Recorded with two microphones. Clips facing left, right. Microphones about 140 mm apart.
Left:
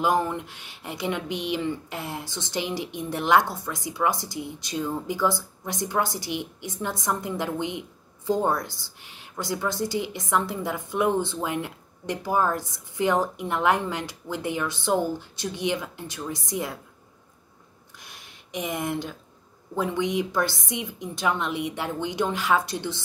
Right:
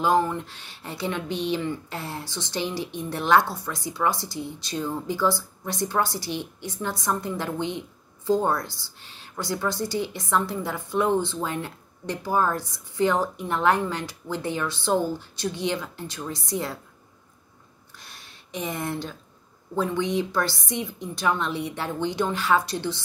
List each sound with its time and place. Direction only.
0.3 s a woman's voice: 20° left (ahead or behind)
17.9 s a sound: 20° left (ahead or behind)
19.8 s a woman's voice: 15° left (ahead or behind)